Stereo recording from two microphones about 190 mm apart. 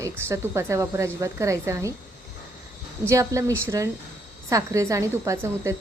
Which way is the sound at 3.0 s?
15° right (ahead or behind).